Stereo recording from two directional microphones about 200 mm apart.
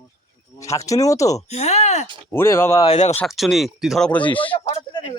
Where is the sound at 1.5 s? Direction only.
35° left (ahead or behind).